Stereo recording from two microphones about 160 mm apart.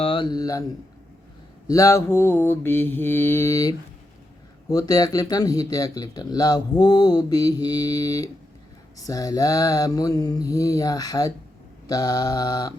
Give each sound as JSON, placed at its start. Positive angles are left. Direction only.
{"t": 0.0, "sound": "speech", "side_deg": 30}
{"t": 1.6, "sound": "mantra", "side_deg": 20}
{"t": 4.7, "sound": "speech", "side_deg": 20}